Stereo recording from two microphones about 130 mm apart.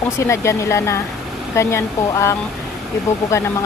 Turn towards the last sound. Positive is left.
turn(degrees=20)  # may be behind; listen again after turning